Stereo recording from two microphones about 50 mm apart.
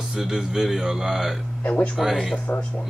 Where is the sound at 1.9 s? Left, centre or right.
Centre.